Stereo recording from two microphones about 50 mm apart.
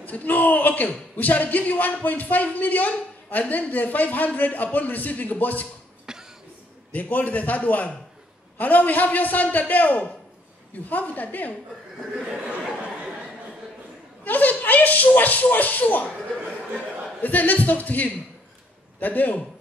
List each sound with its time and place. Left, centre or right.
0.0 s a woman's voice: left
6.1 s cough: centre
6.9 s a woman's voice: left
12.3 s speech: centre
14.2 s a woman's voice: left
17.2 s a woman's voice: left